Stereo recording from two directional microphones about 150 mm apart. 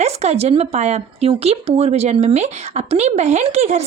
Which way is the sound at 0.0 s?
45° right (ahead or behind).